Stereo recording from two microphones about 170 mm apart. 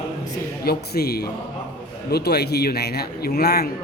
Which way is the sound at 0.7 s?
65° left (ahead or behind).